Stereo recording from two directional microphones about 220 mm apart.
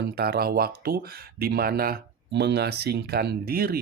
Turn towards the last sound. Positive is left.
turn(degrees=-45)  # may be behind; listen again after turning